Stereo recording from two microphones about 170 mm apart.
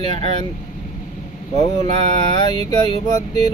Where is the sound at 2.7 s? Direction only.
20° left (ahead or behind).